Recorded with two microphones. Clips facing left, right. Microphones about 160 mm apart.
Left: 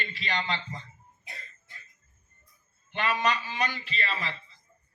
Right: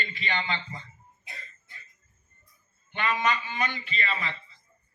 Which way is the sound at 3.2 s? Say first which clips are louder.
Even; 35° left (ahead or behind).